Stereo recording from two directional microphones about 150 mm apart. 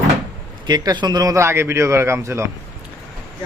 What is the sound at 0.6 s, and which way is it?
A man's voice, 30° right (ahead or behind).